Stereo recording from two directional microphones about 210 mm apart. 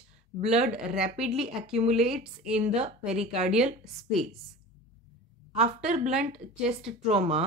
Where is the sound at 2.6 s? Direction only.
30° right (ahead or behind).